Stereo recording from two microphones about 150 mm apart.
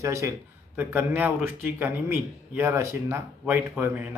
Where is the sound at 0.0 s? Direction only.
20° right (ahead or behind).